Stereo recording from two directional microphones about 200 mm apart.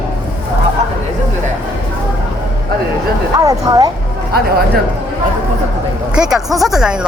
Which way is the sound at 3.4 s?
15° right (ahead or behind).